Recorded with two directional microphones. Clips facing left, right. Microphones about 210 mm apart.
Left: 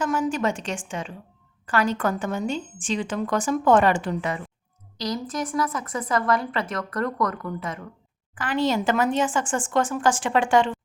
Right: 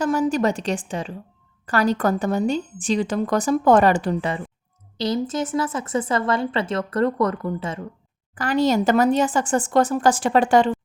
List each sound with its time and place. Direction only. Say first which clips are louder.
0.0 s a woman's voice: right 4 dB; 35° right (ahead or behind)
8.4 s a woman's voice: right 4 dB; 40° right (ahead or behind)